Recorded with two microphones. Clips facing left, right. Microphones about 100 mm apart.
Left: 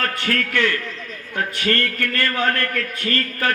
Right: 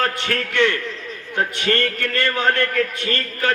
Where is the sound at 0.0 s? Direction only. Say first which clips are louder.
Right 1 dB; 20° right (ahead or behind).